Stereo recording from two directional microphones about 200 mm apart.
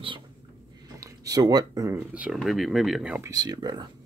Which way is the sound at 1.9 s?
5° right (ahead or behind).